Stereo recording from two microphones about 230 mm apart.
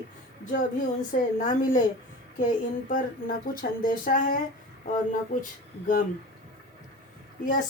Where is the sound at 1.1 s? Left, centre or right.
Left.